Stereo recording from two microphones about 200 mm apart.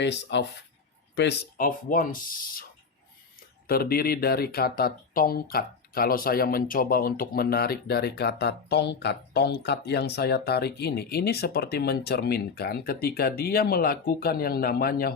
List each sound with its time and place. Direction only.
0.0 s speech: 60° left (ahead or behind)
3.7 s speech: 50° left (ahead or behind)